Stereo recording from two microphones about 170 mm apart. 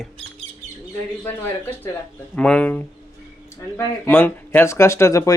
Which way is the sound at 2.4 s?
5° left (ahead or behind).